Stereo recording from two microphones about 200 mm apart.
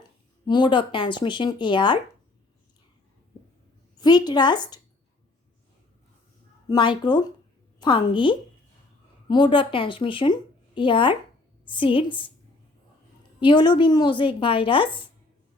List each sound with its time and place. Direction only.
0.4 s speech: 25° left (ahead or behind)
3.9 s speech: 20° left (ahead or behind)
6.7 s speech: 25° left (ahead or behind)
13.4 s speech: 20° left (ahead or behind)